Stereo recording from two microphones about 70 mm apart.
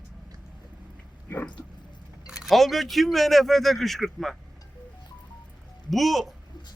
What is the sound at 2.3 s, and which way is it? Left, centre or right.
Speech, centre.